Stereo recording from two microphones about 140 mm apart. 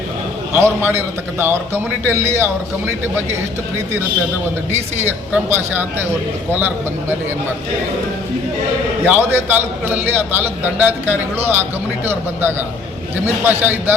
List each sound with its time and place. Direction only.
0.6 s a man's voice: 15° right (ahead or behind)
5.0 s a man's voice: 15° right (ahead or behind)
9.0 s a man's voice: 15° right (ahead or behind)